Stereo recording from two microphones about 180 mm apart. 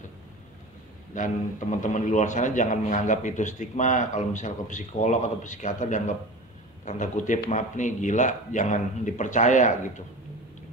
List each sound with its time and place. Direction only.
1.1 s a man's voice: 45° left (ahead or behind)